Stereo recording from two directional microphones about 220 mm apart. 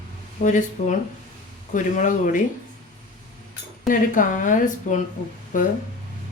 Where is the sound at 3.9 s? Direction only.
35° left (ahead or behind).